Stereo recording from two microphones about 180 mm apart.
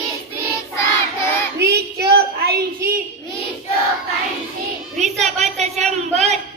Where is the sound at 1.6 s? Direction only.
60° right (ahead or behind).